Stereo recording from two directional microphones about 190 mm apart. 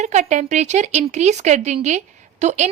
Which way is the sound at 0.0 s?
40° right (ahead or behind).